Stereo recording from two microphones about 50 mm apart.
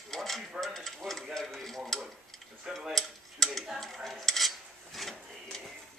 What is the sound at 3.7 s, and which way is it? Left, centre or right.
Dishes, centre.